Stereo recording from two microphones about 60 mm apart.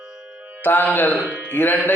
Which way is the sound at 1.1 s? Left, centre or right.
Right.